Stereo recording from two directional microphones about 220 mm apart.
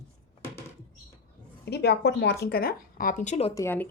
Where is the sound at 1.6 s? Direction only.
50° left (ahead or behind); by 3.5 s 30° left (ahead or behind).